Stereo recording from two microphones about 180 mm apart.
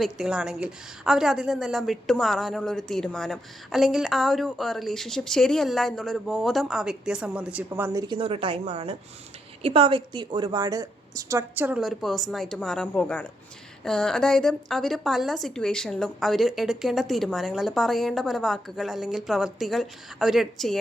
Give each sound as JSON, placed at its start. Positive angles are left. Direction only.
{"t": 0.0, "sound": "a woman's voice", "side_deg": -5}
{"t": 8.0, "sound": "a woman's voice", "side_deg": -30}